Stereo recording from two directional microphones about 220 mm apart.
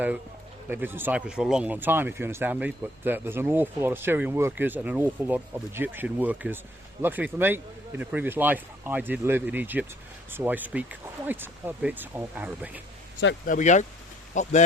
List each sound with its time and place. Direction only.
0.7 s speech: 10° right (ahead or behind)
13.4 s speech: 35° left (ahead or behind)